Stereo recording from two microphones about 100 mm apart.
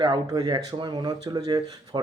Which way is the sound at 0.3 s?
35° right (ahead or behind).